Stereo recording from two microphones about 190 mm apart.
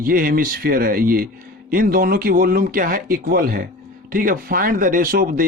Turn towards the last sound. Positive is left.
turn(degrees=-50)  # may be behind; listen again after turning